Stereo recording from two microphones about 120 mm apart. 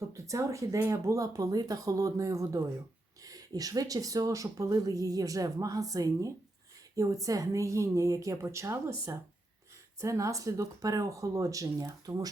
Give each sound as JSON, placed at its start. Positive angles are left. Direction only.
{"t": 0.1, "sound": "speech", "side_deg": -25}